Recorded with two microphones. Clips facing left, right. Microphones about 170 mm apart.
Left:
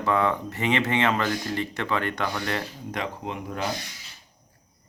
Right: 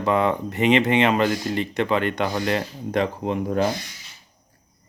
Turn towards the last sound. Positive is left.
turn(degrees=-40)  # may be behind; listen again after turning